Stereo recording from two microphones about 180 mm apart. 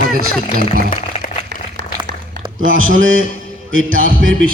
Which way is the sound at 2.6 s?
90° right.